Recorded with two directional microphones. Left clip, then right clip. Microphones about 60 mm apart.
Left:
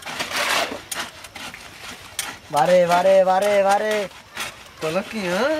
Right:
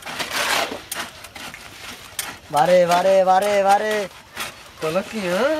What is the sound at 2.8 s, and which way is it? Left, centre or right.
Speech, right.